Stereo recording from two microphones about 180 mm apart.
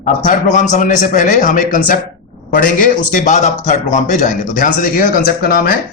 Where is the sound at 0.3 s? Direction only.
45° left (ahead or behind).